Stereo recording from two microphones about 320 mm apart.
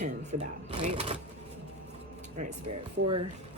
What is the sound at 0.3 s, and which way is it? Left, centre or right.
Speech, right.